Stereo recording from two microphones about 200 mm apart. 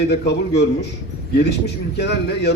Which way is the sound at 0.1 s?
55° left (ahead or behind).